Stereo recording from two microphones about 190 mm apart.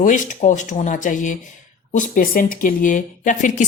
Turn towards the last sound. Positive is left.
turn(degrees=40)  # may be behind; listen again after turning